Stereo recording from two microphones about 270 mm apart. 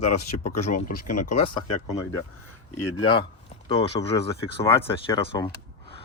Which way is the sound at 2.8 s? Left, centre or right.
Left.